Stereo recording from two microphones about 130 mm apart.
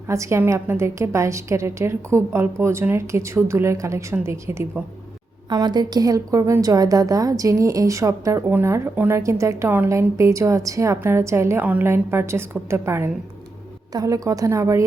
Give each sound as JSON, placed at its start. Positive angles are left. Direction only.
{"t": 0.1, "sound": "a woman's voice", "side_deg": -20}
{"t": 5.5, "sound": "a woman's voice", "side_deg": -35}